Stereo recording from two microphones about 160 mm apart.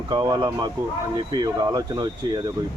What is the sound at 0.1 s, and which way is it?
Speech, 25° right (ahead or behind).